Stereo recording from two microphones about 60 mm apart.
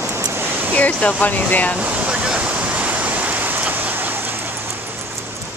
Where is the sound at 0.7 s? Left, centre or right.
Left.